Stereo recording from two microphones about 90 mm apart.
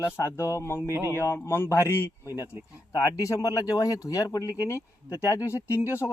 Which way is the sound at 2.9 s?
40° left (ahead or behind).